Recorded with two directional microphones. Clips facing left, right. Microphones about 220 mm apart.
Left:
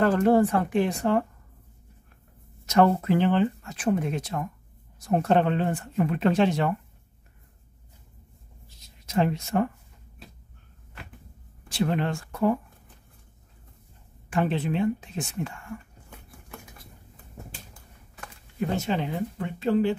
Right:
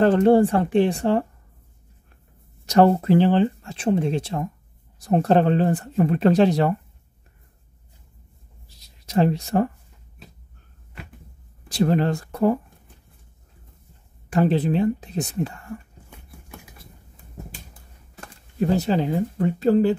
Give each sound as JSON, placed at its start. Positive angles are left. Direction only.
{"t": 0.0, "sound": "speech", "side_deg": -30}
{"t": 2.6, "sound": "speech", "side_deg": -35}
{"t": 8.6, "sound": "a sound", "side_deg": -35}
{"t": 11.7, "sound": "speech", "side_deg": -40}
{"t": 14.3, "sound": "speech", "side_deg": -35}
{"t": 18.2, "sound": "speech", "side_deg": -35}